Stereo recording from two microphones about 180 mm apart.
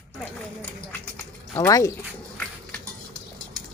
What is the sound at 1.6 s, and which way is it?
Speech, 20° left (ahead or behind).